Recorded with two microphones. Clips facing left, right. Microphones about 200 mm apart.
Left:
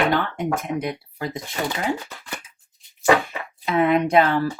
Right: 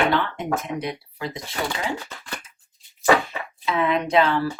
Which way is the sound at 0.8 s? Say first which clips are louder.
Left 2 dB; 50° left (ahead or behind).